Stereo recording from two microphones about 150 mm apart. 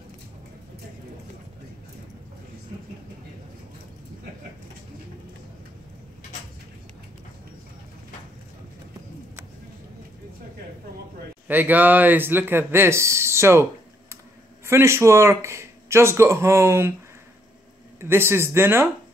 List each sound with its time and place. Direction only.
11.4 s speech: 10° right (ahead or behind)
14.7 s speech: 15° right (ahead or behind)
18.0 s speech: 15° right (ahead or behind)